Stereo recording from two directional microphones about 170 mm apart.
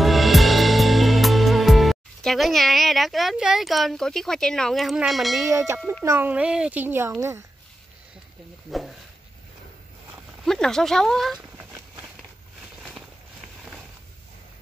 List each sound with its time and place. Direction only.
0.0 s music: centre (ahead or behind)
5.4 s speech: 15° right (ahead or behind)
8.6 s speech: centre (ahead or behind)
10.4 s speech: 5° left (ahead or behind)
11.5 s a sound: 10° right (ahead or behind)